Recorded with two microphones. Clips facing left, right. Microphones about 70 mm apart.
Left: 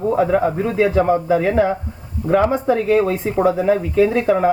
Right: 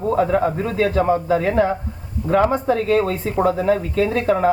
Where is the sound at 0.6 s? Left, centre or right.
Centre.